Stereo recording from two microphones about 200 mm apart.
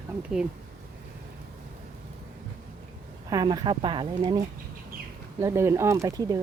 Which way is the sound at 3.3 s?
20° right (ahead or behind).